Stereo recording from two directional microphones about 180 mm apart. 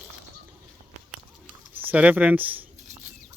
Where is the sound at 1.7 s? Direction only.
10° right (ahead or behind).